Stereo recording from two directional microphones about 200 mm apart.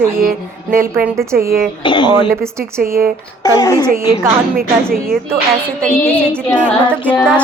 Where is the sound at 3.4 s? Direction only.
20° left (ahead or behind).